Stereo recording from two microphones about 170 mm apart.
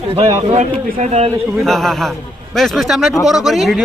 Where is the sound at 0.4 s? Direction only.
45° right (ahead or behind).